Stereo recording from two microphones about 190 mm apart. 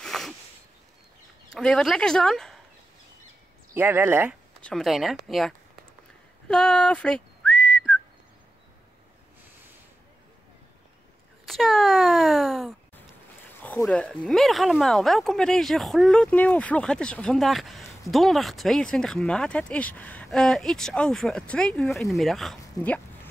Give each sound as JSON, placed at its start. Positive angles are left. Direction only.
{"t": 0.0, "sound": "a sound", "side_deg": 0}
{"t": 1.5, "sound": "speech", "side_deg": 0}
{"t": 3.7, "sound": "speech", "side_deg": -10}
{"t": 4.6, "sound": "speech", "side_deg": 5}
{"t": 6.5, "sound": "whistling", "side_deg": 5}
{"t": 11.4, "sound": "a sound", "side_deg": 0}
{"t": 13.5, "sound": "speech", "side_deg": 10}